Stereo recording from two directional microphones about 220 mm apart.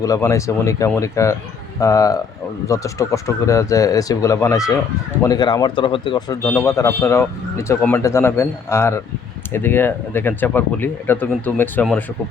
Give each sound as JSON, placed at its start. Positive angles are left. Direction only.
{"t": 0.0, "sound": "a man's voice", "side_deg": 15}